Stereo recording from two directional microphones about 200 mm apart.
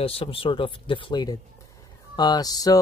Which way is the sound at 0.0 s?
30° left (ahead or behind).